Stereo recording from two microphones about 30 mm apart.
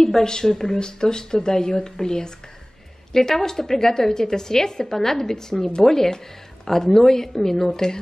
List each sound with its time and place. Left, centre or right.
0.0 s a woman's voice: centre